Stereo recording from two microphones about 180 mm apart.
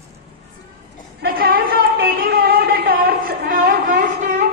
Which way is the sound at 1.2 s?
55° right (ahead or behind).